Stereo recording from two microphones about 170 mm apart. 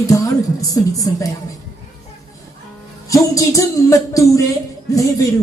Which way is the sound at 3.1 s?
20° left (ahead or behind).